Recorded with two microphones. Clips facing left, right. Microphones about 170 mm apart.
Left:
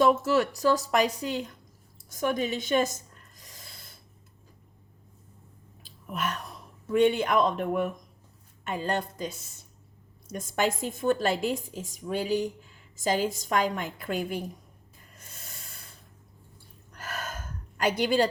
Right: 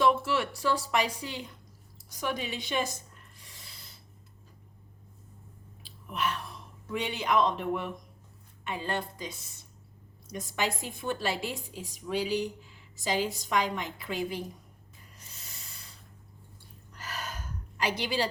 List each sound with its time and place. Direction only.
0.0 s a woman's voice: 40° left (ahead or behind)
3.3 s filing: 40° left (ahead or behind)
5.8 s a sound: 45° left (ahead or behind)
6.9 s a woman's voice: 50° left (ahead or behind)
10.3 s a woman's voice: 50° left (ahead or behind)
15.2 s a sound: 50° left (ahead or behind)
16.9 s gasp: 50° left (ahead or behind)